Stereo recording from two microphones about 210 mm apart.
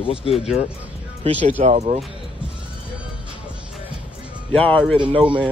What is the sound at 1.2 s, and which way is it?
Speech, 30° right (ahead or behind).